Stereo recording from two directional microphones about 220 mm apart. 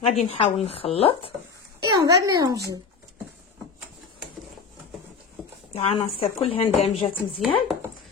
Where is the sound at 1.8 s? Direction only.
15° right (ahead or behind).